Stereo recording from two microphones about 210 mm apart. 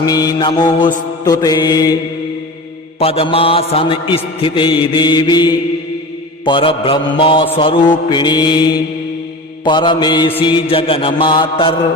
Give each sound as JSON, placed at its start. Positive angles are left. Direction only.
{"t": 0.0, "sound": "mantra", "side_deg": 20}
{"t": 3.0, "sound": "mantra", "side_deg": 25}